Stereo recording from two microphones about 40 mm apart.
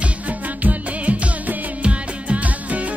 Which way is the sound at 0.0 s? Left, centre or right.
Right.